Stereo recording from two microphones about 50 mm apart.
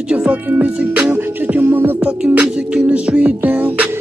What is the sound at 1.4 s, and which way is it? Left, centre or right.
Music, right.